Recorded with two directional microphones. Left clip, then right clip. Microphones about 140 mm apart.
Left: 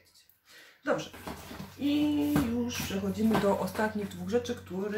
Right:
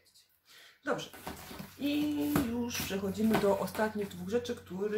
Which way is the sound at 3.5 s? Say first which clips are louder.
Left 2 dB; 20° right (ahead or behind).